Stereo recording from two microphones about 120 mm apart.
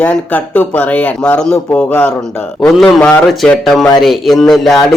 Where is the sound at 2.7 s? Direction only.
Centre (ahead or behind).